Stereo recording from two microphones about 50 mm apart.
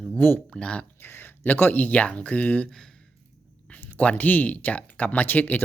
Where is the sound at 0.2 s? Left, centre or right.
Left.